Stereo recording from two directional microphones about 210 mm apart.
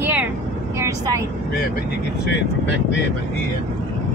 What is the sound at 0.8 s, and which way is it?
Speech, 15° right (ahead or behind).